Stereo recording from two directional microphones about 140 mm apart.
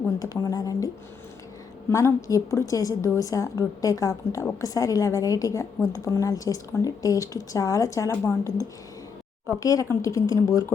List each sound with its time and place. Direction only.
0.2 s a woman's voice: 25° left (ahead or behind)
1.9 s a woman's voice: 20° left (ahead or behind)
9.6 s a woman's voice: 25° left (ahead or behind)